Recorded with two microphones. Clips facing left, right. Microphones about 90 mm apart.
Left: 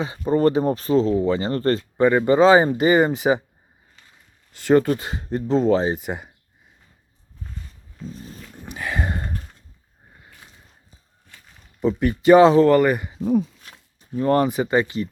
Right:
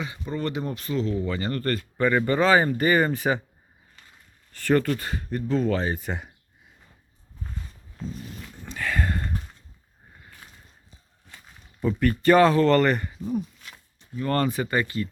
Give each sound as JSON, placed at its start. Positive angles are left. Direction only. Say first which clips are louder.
{"t": 0.0, "sound": "speech", "louder": "left 11 dB", "side_deg": 35}
{"t": 4.5, "sound": "speech", "louder": "left 5 dB", "side_deg": 20}
{"t": 8.6, "sound": "a sound", "louder": "left 1 dB", "side_deg": 15}
{"t": 11.8, "sound": "speech", "louder": "left 3 dB", "side_deg": 20}
{"t": 13.7, "sound": "a sound", "louder": "left 6 dB", "side_deg": 40}
{"t": 14.3, "sound": "speech", "louder": "left 6 dB", "side_deg": 20}